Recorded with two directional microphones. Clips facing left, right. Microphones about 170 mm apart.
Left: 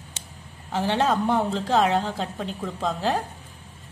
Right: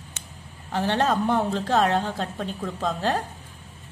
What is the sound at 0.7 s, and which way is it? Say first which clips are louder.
A woman's voice: even; 15° left (ahead or behind).